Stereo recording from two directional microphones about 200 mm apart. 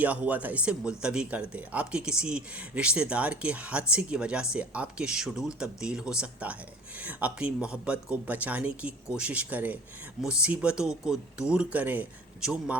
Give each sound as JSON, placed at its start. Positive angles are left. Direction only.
{"t": 0.0, "sound": "speech", "side_deg": -10}